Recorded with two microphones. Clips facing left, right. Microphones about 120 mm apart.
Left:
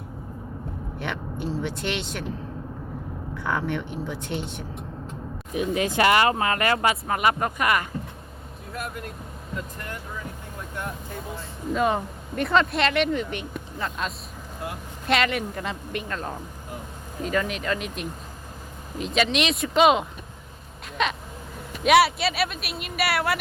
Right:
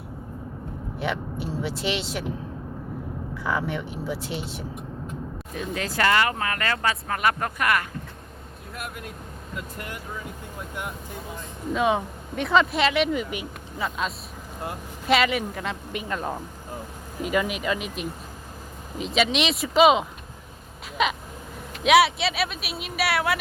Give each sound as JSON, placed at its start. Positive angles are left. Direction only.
{"t": 0.9, "sound": "speech", "side_deg": -5}
{"t": 3.3, "sound": "speech", "side_deg": -5}
{"t": 5.5, "sound": "speech", "side_deg": 20}
{"t": 11.7, "sound": "speech", "side_deg": 0}
{"t": 21.0, "sound": "a sound", "side_deg": -5}
{"t": 21.8, "sound": "speech", "side_deg": 0}